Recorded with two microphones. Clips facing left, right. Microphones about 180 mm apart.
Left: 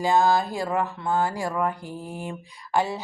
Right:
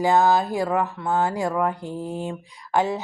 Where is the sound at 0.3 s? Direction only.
15° right (ahead or behind).